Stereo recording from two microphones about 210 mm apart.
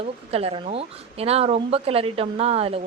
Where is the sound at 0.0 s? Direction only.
30° right (ahead or behind).